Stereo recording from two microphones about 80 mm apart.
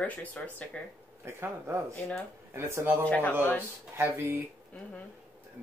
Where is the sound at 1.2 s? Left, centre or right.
Right.